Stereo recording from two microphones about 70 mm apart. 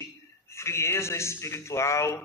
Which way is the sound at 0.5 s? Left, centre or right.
Left.